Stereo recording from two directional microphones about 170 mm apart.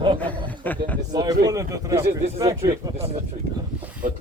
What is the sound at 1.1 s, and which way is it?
Speech, 25° right (ahead or behind).